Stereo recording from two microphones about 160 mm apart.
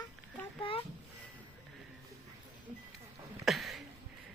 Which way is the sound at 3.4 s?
Centre (ahead or behind).